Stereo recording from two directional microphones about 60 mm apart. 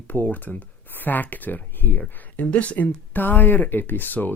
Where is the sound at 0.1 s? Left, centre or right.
Left.